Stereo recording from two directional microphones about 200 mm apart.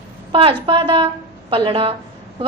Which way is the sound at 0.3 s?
25° right (ahead or behind).